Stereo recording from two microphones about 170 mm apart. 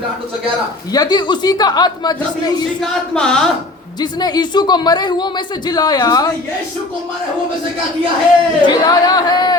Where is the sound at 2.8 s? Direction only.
5° left (ahead or behind).